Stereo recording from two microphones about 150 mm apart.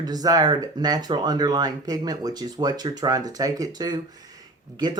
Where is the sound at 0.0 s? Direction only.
25° right (ahead or behind).